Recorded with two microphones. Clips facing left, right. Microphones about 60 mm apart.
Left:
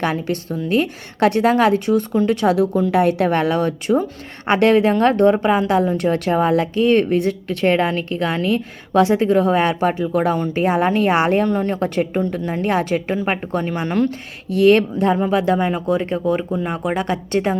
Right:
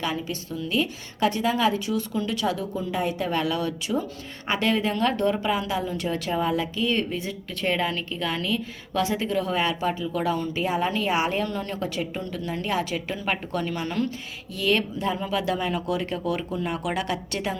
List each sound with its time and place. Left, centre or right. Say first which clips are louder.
0.0 s speech: left 8 dB; left
2.6 s a woman's voice: left 12 dB; left
3.4 s a woman's voice: left 8 dB; left